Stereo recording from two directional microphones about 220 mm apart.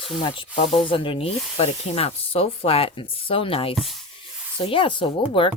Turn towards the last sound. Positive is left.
turn(degrees=25)  # may be behind; listen again after turning